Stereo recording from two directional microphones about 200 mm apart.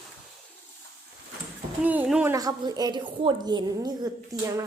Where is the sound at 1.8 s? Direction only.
5° right (ahead or behind).